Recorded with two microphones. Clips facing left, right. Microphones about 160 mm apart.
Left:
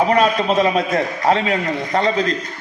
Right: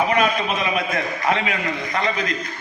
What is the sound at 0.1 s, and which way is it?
A man's voice, 35° left (ahead or behind).